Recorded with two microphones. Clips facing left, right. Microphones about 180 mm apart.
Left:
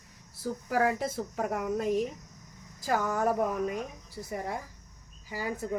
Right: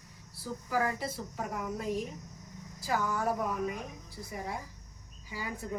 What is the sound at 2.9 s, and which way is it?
Speech, 50° left (ahead or behind).